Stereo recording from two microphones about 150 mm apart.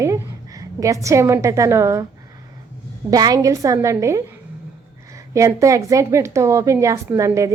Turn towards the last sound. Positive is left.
turn(degrees=-20)  # may be behind; listen again after turning